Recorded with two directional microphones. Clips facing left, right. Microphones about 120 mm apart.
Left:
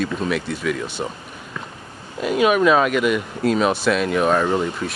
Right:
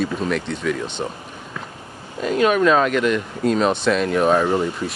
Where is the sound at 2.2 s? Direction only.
10° left (ahead or behind).